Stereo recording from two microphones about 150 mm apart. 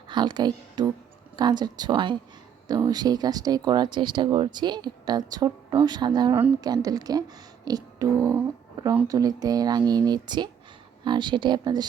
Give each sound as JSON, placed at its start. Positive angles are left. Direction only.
{"t": 0.1, "sound": "speech", "side_deg": -30}